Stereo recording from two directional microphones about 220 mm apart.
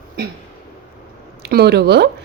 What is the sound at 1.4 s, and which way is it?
Speech, 45° right (ahead or behind).